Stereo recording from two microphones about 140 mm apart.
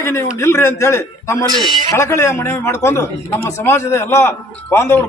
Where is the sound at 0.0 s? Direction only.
20° left (ahead or behind).